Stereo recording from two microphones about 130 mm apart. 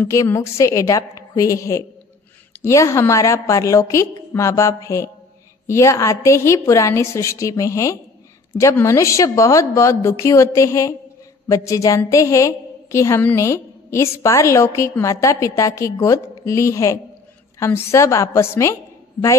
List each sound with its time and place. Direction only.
0.0 s a woman's voice: 20° left (ahead or behind)